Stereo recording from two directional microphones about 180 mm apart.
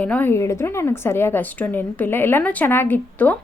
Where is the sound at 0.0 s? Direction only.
10° left (ahead or behind).